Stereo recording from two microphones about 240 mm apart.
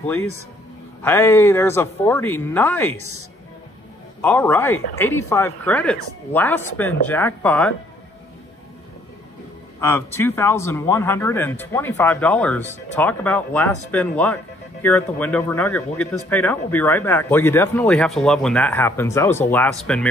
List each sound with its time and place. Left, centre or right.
0.2 s speech: left
1.0 s speech: centre
4.2 s speech: centre
9.8 s speech: centre